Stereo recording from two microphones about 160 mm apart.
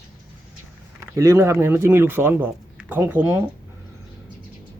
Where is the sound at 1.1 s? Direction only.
20° right (ahead or behind).